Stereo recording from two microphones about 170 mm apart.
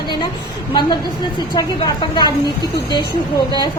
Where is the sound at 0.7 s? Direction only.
25° left (ahead or behind).